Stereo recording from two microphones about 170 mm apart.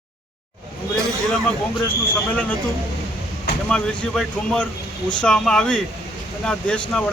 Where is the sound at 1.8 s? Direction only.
10° left (ahead or behind).